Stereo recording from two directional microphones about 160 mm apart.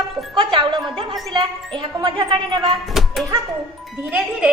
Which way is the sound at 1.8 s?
30° right (ahead or behind).